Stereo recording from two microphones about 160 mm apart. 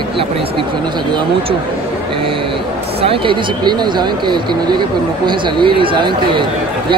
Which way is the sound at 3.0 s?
35° right (ahead or behind).